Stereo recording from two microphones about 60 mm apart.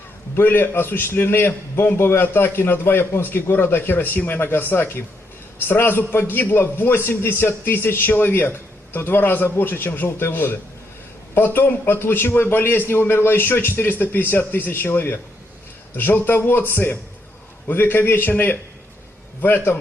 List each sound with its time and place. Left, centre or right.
0.3 s a man's voice: left